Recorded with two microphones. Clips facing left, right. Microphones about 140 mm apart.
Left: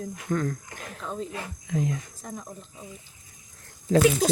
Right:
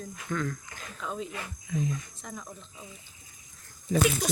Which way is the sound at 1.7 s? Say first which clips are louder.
Left 3 dB; 75° left (ahead or behind).